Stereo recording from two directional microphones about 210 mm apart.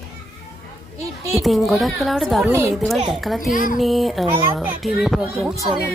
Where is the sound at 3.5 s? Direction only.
40° left (ahead or behind).